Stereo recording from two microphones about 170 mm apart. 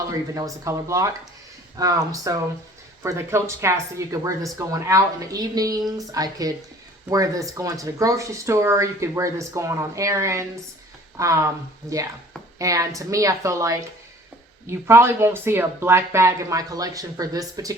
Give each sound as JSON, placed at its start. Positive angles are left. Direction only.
{"t": 0.1, "sound": "speech", "side_deg": -20}
{"t": 12.5, "sound": "speech", "side_deg": -20}